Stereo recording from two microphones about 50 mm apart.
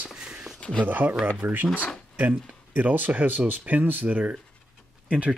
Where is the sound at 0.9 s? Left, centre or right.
Right.